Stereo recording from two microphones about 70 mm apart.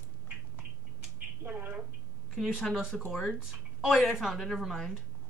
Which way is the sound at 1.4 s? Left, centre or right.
Right.